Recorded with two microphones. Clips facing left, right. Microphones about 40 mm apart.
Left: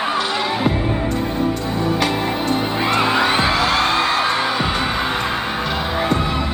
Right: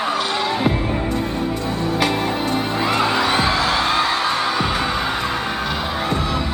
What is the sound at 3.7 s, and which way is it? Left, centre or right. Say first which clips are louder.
Music: left 1 dB; left.